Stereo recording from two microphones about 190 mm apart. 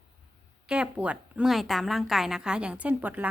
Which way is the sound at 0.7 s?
5° right (ahead or behind).